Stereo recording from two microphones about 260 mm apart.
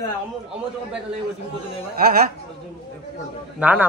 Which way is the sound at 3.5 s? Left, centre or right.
Centre.